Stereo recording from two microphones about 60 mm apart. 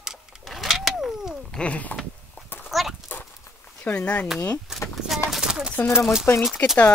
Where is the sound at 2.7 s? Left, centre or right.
Centre.